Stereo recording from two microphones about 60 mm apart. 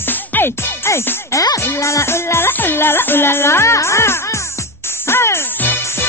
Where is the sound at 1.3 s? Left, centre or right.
Left.